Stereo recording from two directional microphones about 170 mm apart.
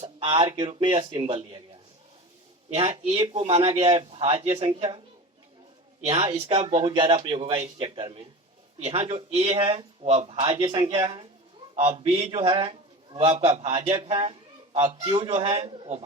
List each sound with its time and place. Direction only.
0.0 s speech: 30° right (ahead or behind)
3.1 s a man's voice: 35° right (ahead or behind)
6.1 s a man's voice: 35° right (ahead or behind)
15.6 s speech: 25° right (ahead or behind)